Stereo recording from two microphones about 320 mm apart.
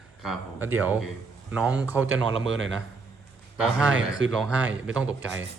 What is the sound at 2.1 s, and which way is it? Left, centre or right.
Speech, right.